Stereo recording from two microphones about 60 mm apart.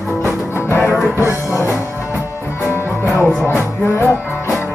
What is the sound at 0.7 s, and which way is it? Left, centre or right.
Music, left.